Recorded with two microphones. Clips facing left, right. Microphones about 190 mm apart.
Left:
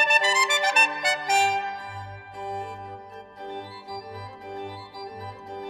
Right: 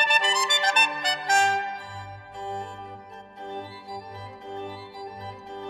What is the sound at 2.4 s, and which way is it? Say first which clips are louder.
Organ: left 1 dB; 30° right (ahead or behind).